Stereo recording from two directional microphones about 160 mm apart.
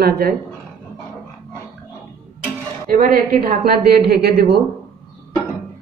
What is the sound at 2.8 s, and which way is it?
A woman's voice, 65° right (ahead or behind).